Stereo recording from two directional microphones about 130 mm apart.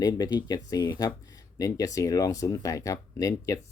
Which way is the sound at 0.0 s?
30° left (ahead or behind).